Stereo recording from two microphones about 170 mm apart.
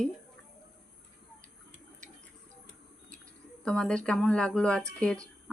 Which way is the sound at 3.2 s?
5° left (ahead or behind).